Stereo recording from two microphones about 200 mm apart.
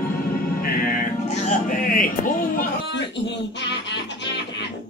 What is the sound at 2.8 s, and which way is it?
Music, 60° left (ahead or behind).